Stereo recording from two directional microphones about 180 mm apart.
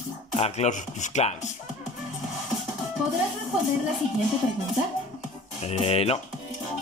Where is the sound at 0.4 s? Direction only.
40° left (ahead or behind).